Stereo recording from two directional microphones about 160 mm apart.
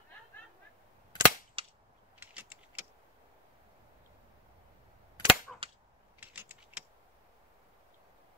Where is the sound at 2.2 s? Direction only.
10° right (ahead or behind).